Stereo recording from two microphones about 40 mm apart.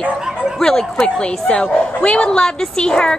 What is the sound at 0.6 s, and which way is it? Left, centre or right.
A woman's voice, centre.